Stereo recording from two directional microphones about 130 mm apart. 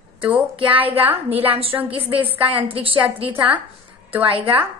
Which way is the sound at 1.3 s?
45° right (ahead or behind).